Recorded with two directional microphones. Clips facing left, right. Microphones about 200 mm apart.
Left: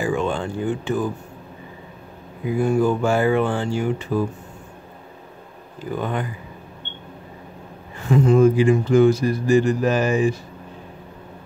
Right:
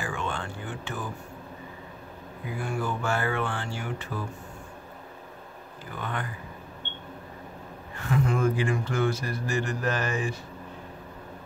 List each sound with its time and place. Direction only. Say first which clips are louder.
0.0 s speech: left 10 dB; 15° left (ahead or behind)
2.6 s speech: left 12 dB; 15° left (ahead or behind)
5.9 s speech: left 8 dB; 15° left (ahead or behind)
8.1 s speech: left 10 dB; 25° left (ahead or behind)